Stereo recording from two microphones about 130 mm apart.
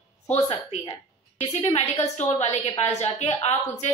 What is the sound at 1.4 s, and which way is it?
Speech, 50° left (ahead or behind).